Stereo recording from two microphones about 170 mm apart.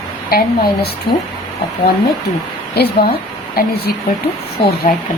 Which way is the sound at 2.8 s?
65° left (ahead or behind).